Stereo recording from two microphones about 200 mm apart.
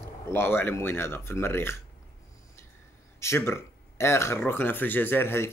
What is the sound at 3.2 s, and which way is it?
Speech, 15° left (ahead or behind).